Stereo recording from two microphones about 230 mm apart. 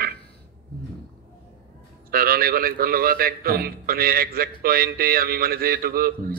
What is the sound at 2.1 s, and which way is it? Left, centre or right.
A man's voice, right.